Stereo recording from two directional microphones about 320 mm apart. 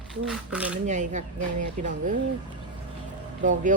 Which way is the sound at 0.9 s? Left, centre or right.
Right.